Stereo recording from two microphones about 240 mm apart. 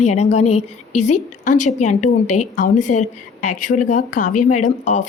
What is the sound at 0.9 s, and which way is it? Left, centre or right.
Speech, left.